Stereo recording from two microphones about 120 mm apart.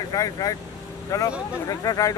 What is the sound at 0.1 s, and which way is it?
Speech, 30° left (ahead or behind).